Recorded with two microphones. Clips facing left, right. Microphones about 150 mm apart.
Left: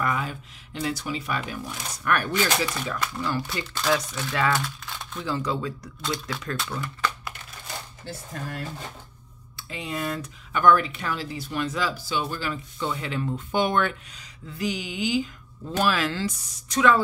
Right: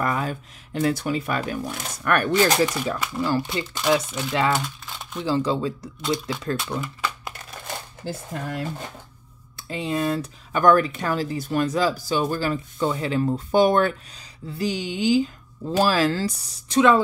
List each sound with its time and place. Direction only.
0.0 s speech: 40° right (ahead or behind)
2.3 s speech: 40° right (ahead or behind)
3.4 s speech: 20° right (ahead or behind)
5.2 s speech: 30° right (ahead or behind)
9.6 s a woman's voice: 35° right (ahead or behind)